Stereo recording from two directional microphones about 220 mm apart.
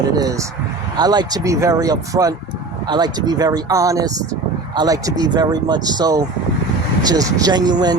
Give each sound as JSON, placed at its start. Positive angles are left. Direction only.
{"t": 0.2, "sound": "speech", "side_deg": -15}